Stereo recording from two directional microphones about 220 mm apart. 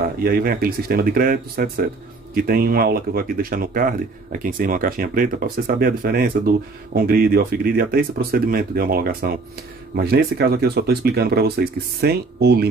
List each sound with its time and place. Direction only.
0.0 s speech: 45° right (ahead or behind)